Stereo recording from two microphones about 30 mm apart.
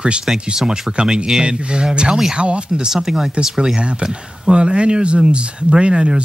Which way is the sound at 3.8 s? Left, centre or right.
Right.